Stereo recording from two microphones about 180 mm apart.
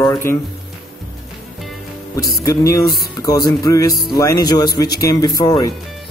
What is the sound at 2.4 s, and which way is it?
Speech, 20° left (ahead or behind).